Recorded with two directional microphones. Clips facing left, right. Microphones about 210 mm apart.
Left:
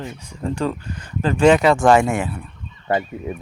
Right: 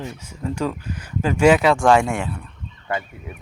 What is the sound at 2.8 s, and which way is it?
Goose, 35° left (ahead or behind).